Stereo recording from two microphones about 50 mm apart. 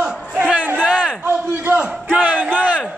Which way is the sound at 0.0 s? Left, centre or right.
Centre.